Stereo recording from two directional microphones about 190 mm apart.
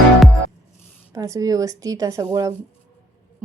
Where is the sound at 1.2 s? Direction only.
15° right (ahead or behind).